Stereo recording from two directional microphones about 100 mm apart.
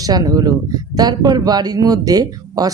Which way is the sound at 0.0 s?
40° right (ahead or behind).